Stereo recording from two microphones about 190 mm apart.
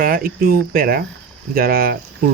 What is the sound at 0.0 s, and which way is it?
Speech, 50° right (ahead or behind).